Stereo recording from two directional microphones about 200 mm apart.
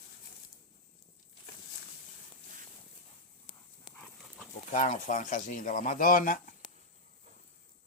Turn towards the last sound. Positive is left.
turn(degrees=45)  # may be behind; listen again after turning